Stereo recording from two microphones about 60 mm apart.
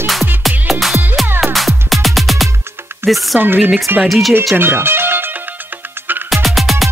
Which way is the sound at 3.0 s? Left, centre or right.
Right.